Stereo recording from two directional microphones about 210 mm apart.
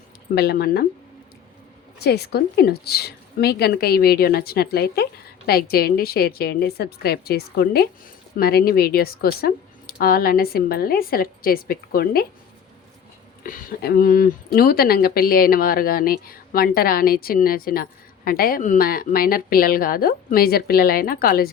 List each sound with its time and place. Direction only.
0.3 s speech: 50° left (ahead or behind)
2.0 s speech: 50° left (ahead or behind)
13.4 s speech: 40° left (ahead or behind)